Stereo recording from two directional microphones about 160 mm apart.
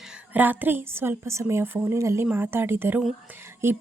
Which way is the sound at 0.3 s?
10° right (ahead or behind).